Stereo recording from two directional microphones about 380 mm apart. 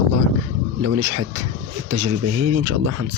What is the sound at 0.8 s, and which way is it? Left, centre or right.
Speech, right.